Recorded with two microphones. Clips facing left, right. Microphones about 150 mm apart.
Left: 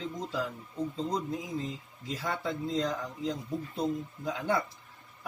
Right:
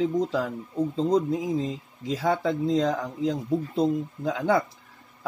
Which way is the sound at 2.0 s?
90° right.